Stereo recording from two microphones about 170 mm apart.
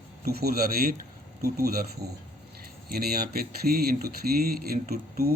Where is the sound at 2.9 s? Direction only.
65° right (ahead or behind).